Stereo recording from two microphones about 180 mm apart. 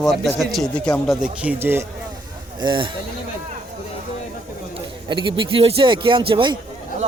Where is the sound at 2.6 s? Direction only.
25° right (ahead or behind).